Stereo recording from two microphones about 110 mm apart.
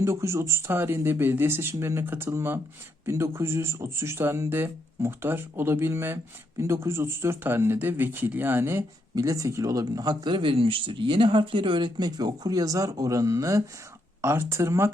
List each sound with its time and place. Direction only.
0.0 s speech: 25° right (ahead or behind)
9.1 s speech: 30° right (ahead or behind)